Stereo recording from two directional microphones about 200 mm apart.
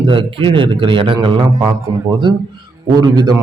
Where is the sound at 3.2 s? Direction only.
20° right (ahead or behind).